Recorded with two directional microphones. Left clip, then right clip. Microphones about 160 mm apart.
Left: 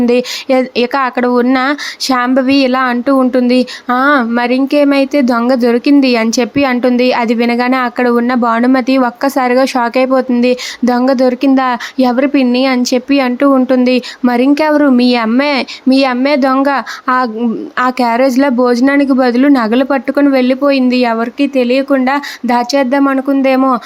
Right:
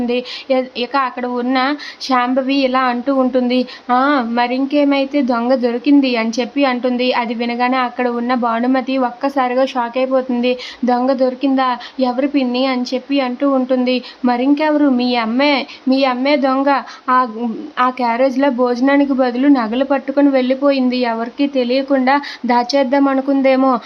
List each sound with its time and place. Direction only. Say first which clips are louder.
0.0 s speech: left 8 dB; 45° left (ahead or behind); by 23.8 s 25° left (ahead or behind)